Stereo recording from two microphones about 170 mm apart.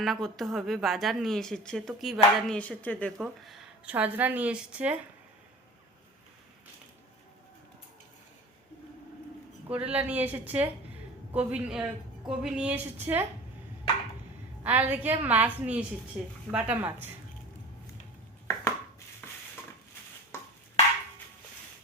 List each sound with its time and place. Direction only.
0.0 s a woman's voice: centre (ahead or behind)
9.7 s a woman's voice: 10° right (ahead or behind)
13.9 s chop: 35° left (ahead or behind)
14.6 s a woman's voice: 10° right (ahead or behind)
18.4 s a sound: 15° left (ahead or behind)